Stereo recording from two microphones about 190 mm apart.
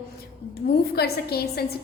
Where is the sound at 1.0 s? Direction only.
55° left (ahead or behind).